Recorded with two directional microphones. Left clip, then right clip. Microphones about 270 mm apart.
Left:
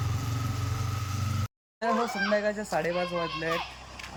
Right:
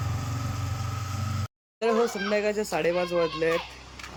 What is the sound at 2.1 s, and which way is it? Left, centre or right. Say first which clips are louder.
Speech: right 1 dB; centre.